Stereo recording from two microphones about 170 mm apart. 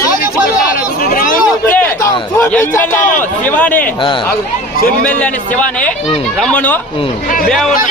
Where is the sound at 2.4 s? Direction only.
10° left (ahead or behind).